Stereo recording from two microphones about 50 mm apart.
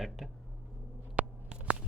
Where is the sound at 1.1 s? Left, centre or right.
Right.